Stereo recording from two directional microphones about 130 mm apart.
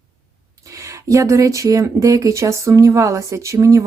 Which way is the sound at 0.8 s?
25° right (ahead or behind).